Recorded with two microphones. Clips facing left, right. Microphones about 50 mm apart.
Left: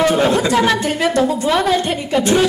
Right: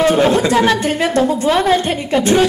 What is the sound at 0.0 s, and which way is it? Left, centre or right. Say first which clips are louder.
A woman's voice: right 2 dB; right.